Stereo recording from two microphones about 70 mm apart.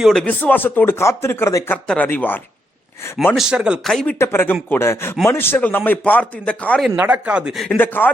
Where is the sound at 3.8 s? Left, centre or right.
Centre.